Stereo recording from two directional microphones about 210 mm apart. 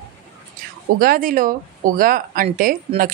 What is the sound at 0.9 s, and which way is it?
A woman's voice, 45° right (ahead or behind).